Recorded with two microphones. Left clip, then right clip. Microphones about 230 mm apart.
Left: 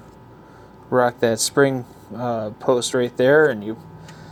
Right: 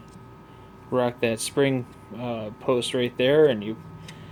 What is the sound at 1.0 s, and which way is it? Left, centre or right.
Speech, centre.